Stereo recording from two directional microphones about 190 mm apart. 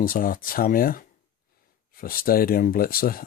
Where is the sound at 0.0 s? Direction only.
50° left (ahead or behind).